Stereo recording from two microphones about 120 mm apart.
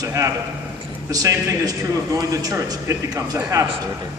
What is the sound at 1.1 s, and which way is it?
Speech, 25° right (ahead or behind).